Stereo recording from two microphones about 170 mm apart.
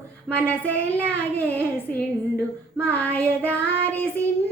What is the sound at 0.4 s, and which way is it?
Child singing, 10° left (ahead or behind).